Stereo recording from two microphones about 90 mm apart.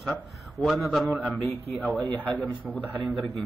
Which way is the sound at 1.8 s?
20° left (ahead or behind).